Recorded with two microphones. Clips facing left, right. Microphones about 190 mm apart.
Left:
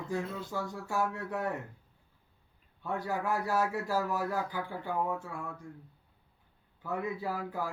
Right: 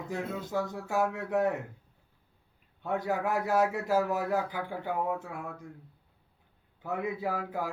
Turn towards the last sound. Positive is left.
turn(degrees=-20)  # may be behind; listen again after turning